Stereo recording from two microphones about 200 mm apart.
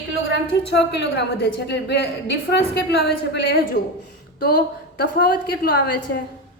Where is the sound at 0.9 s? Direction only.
60° left (ahead or behind).